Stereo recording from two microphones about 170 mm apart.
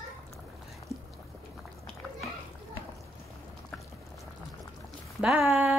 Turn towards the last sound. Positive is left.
turn(degrees=-15)  # may be behind; listen again after turning